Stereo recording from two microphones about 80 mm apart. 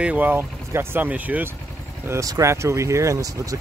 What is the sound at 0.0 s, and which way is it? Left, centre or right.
Speech, centre.